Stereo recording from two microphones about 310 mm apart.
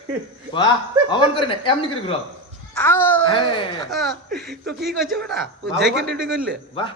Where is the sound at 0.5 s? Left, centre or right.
Centre.